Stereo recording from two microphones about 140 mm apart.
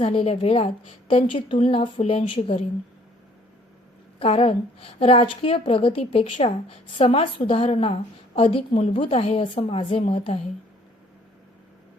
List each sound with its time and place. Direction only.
0.0 s a woman's voice: 40° left (ahead or behind)
4.2 s a woman's voice: 45° left (ahead or behind)